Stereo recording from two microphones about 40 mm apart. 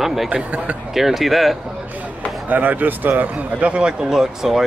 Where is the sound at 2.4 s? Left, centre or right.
Right.